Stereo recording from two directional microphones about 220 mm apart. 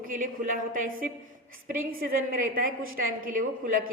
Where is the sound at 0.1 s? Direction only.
40° right (ahead or behind).